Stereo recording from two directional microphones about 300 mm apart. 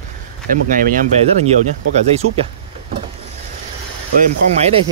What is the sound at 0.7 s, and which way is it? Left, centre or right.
Speech, right.